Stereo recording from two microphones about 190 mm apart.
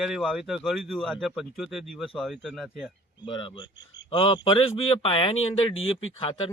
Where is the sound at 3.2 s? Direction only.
25° left (ahead or behind).